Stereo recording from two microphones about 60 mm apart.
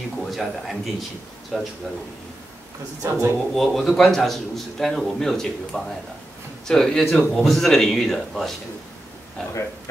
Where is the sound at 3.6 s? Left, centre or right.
Centre.